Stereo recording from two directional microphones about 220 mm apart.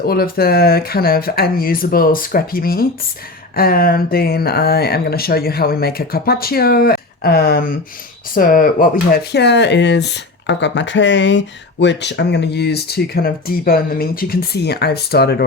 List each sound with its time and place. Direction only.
0.0 s speech: 45° left (ahead or behind)
9.3 s speech: 50° left (ahead or behind)